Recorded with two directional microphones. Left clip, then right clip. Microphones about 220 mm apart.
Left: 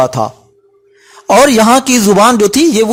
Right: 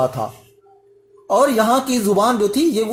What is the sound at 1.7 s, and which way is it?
Speech, 35° left (ahead or behind).